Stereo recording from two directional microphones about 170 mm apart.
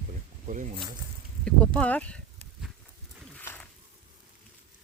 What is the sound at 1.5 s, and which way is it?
Speech, 5° left (ahead or behind).